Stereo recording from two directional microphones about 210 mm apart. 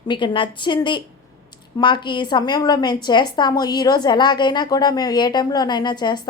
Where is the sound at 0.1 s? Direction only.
25° left (ahead or behind).